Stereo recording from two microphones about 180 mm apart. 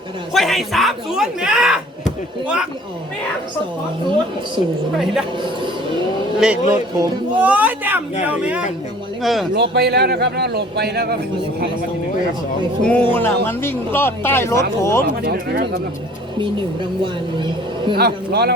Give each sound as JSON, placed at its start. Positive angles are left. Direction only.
{"t": 0.3, "sound": "speech", "side_deg": 0}
{"t": 6.4, "sound": "a man's voice", "side_deg": -5}
{"t": 9.6, "sound": "a man's voice", "side_deg": -65}
{"t": 12.8, "sound": "speech", "side_deg": 10}
{"t": 15.0, "sound": "a man's voice", "side_deg": -60}
{"t": 17.9, "sound": "a man's voice", "side_deg": -65}